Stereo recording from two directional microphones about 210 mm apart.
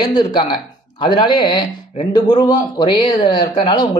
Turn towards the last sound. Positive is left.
turn(degrees=25)  # may be behind; listen again after turning